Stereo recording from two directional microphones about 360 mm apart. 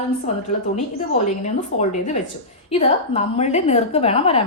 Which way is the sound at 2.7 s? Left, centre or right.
Centre.